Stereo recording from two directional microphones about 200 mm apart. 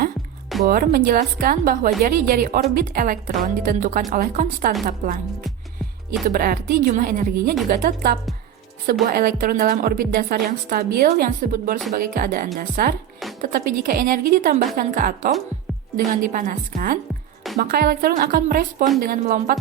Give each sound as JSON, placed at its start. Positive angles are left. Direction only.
{"t": 0.7, "sound": "a woman's voice", "side_deg": -45}
{"t": 6.2, "sound": "a woman's voice", "side_deg": -45}